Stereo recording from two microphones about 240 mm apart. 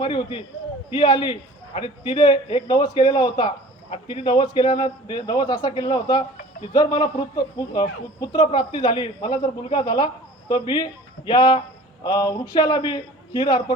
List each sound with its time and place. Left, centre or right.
0.0 s a man's voice: left